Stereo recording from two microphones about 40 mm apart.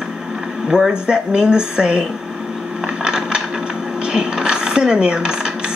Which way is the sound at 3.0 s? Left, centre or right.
Right.